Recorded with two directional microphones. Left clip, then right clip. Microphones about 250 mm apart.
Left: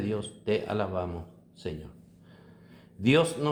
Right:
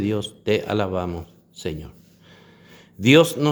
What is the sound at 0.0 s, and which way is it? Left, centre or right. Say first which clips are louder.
A man's voice: right 8 dB; right.